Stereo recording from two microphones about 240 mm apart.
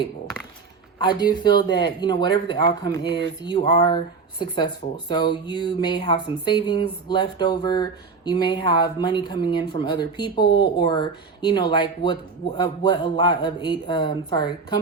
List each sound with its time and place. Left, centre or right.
1.0 s speech: centre